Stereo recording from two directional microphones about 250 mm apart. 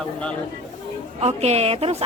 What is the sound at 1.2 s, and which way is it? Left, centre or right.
Speech, right.